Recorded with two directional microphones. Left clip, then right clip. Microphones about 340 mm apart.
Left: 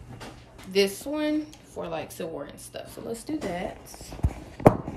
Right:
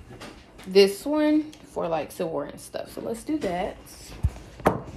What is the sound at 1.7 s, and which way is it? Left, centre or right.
Speech, centre.